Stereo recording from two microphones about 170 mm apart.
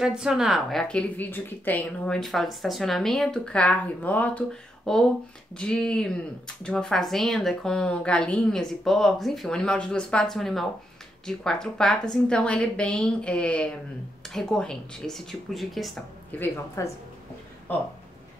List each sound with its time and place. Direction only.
0.0 s speech: 5° right (ahead or behind)
16.3 s speech: 15° left (ahead or behind)